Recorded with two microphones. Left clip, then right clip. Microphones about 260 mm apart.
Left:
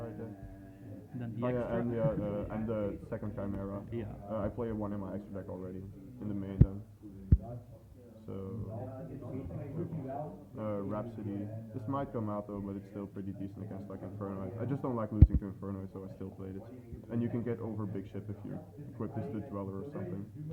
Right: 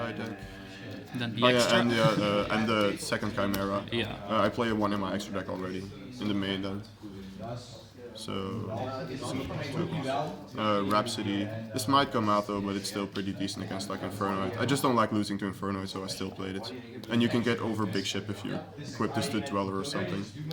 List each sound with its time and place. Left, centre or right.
1.2 s a man's voice: right
8.3 s a man's voice: centre
10.6 s a man's voice: centre